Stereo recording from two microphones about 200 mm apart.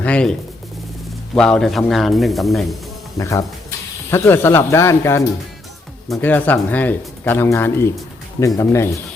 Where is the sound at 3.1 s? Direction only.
15° left (ahead or behind).